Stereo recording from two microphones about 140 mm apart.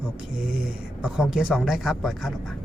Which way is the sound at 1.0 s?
5° right (ahead or behind).